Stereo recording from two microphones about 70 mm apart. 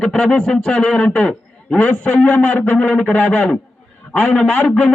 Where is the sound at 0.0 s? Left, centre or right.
Centre.